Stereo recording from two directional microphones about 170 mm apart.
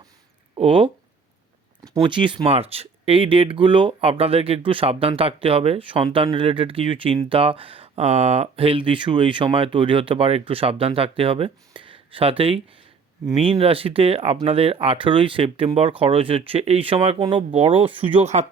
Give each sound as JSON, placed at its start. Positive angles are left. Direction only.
{"t": 0.5, "sound": "speech", "side_deg": -30}
{"t": 1.9, "sound": "speech", "side_deg": -30}